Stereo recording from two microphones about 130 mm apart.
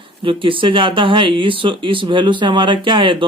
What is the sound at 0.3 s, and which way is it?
Speech, 40° right (ahead or behind).